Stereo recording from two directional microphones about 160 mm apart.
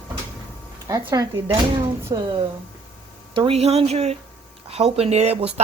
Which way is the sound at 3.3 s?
35° right (ahead or behind).